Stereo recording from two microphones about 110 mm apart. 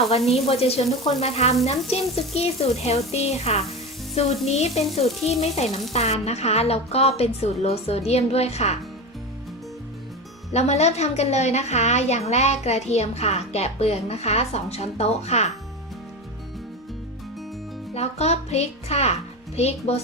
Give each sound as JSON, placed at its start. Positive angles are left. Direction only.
{"t": 0.3, "sound": "a woman's voice", "side_deg": 65}
{"t": 10.5, "sound": "a woman's voice", "side_deg": 85}
{"t": 17.9, "sound": "a woman's voice", "side_deg": 75}